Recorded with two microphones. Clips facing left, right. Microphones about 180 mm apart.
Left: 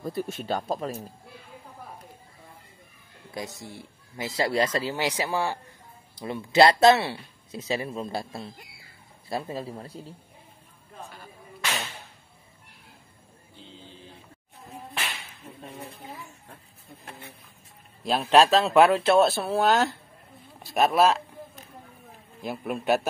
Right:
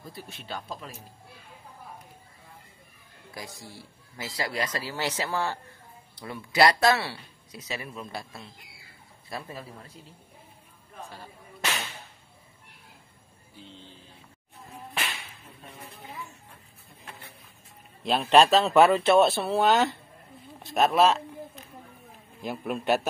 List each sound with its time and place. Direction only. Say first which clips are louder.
0.0 s speech: left 12 dB; 45° left (ahead or behind)
3.3 s speech: left 5 dB; 20° left (ahead or behind)
4.9 s speech: left 3 dB; 15° left (ahead or behind)
6.2 s speech: left 4 dB; 25° left (ahead or behind)
18.0 s a man's voice: even; centre (ahead or behind)
22.4 s speech: even; 5° left (ahead or behind)